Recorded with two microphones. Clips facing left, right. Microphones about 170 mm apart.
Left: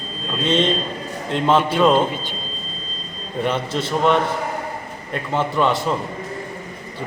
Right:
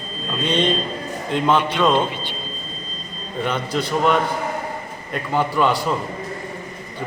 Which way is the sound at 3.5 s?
25° left (ahead or behind).